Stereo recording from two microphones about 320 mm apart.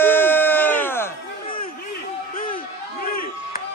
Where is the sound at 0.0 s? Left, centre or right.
Centre.